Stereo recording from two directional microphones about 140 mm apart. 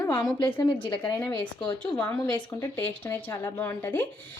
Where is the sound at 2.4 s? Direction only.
30° left (ahead or behind).